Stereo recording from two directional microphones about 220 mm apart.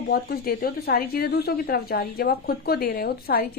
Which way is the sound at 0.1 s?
45° left (ahead or behind).